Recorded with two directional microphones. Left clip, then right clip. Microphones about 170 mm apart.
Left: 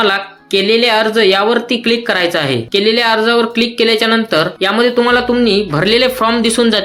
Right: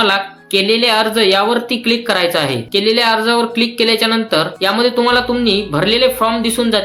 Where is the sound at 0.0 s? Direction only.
15° left (ahead or behind).